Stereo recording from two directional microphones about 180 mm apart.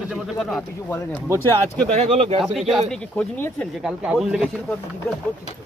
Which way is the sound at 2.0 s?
30° right (ahead or behind).